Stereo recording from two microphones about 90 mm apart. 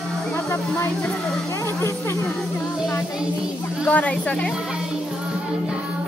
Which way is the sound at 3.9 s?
15° left (ahead or behind).